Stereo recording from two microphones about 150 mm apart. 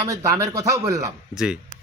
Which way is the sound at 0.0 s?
20° right (ahead or behind).